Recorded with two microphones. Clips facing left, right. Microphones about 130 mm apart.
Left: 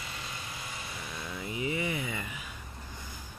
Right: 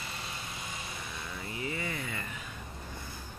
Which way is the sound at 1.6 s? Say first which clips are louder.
Left 4 dB; 15° left (ahead or behind).